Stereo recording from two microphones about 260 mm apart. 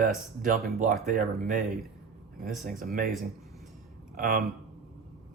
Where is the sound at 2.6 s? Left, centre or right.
Right.